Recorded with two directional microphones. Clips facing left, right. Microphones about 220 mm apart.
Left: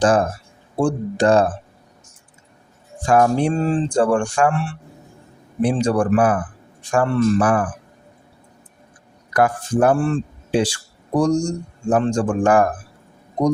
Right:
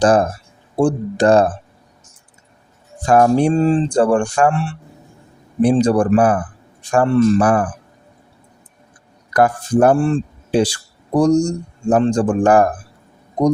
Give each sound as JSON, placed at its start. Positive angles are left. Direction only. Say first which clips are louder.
{"t": 0.0, "sound": "speech", "louder": "right 3 dB", "side_deg": -35}
{"t": 3.1, "sound": "speech", "louder": "right 3 dB", "side_deg": -40}
{"t": 9.3, "sound": "speech", "louder": "right 3 dB", "side_deg": -40}